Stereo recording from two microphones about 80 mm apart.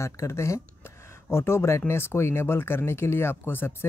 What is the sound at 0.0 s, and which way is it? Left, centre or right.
Speech, left.